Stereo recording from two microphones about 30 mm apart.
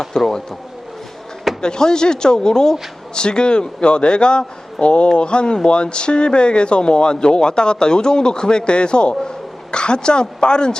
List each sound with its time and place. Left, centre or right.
0.1 s a man's voice: left
1.6 s a man's voice: left